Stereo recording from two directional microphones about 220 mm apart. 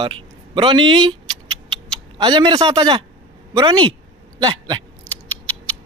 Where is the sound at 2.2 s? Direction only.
20° right (ahead or behind).